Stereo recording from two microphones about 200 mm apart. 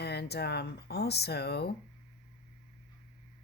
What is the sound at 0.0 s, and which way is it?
A woman's voice, 55° left (ahead or behind).